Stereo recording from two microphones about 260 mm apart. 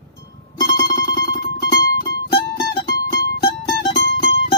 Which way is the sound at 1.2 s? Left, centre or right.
Left.